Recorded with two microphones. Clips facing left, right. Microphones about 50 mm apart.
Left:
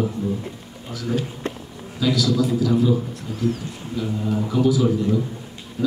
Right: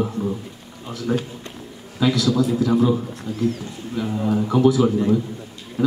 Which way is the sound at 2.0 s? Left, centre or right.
Right.